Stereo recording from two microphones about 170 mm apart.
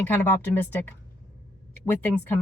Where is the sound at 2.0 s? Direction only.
10° left (ahead or behind).